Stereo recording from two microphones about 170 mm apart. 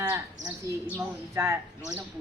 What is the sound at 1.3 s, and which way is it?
Speech, 15° right (ahead or behind).